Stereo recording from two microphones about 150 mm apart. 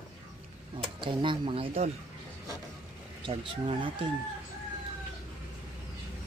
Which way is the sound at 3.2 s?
35° right (ahead or behind).